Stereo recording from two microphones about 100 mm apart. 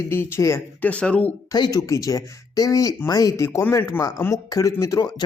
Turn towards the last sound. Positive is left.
turn(degrees=35)  # may be behind; listen again after turning